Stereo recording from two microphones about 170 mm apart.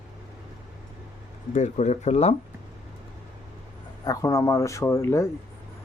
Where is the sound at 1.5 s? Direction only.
45° left (ahead or behind).